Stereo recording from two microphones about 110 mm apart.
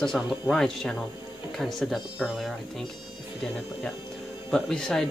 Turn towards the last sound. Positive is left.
turn(degrees=5)  # may be behind; listen again after turning